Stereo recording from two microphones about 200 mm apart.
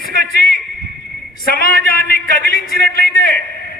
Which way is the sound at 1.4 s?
50° left (ahead or behind).